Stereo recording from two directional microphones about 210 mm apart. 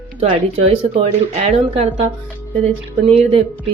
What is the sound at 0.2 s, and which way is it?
Speech, 30° right (ahead or behind).